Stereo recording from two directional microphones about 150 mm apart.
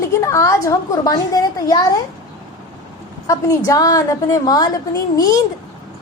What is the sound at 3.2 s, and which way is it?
A woman's voice, 20° left (ahead or behind).